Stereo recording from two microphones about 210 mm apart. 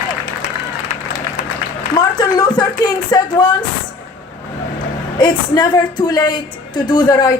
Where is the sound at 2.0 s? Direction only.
20° left (ahead or behind).